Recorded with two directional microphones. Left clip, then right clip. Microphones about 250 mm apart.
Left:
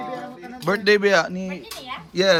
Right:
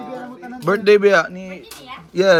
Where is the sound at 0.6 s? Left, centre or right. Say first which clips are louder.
Right 5 dB; centre.